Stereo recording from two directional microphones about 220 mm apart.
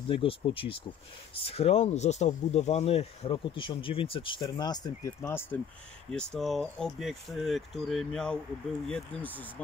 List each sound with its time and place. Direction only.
0.1 s speech: 25° left (ahead or behind); by 9.3 s 5° left (ahead or behind)